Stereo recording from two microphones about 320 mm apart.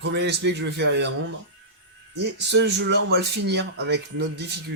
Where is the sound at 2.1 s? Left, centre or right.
Right.